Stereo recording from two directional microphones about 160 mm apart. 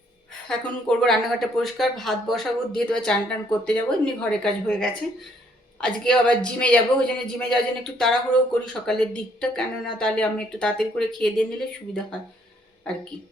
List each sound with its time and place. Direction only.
0.4 s a man's voice: 5° left (ahead or behind)